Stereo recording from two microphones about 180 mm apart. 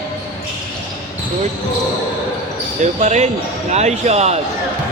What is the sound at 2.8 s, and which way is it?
Speech, 40° right (ahead or behind).